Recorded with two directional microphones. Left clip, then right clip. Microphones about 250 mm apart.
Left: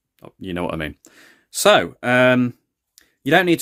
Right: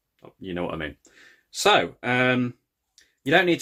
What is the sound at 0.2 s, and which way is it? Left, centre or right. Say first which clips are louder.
Speech: left 4 dB; left.